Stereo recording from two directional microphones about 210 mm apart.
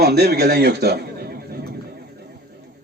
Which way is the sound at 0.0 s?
50° right (ahead or behind).